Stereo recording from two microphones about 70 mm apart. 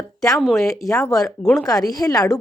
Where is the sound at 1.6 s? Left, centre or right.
Left.